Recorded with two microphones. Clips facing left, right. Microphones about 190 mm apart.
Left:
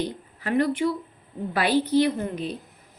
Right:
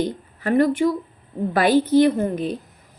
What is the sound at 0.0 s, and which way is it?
A woman's voice, 50° right (ahead or behind).